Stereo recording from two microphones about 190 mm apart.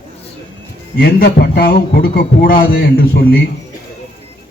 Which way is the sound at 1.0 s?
55° left (ahead or behind).